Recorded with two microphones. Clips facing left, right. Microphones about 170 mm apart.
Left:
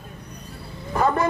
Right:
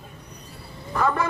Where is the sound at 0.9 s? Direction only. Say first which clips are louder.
Left 3 dB; 35° left (ahead or behind).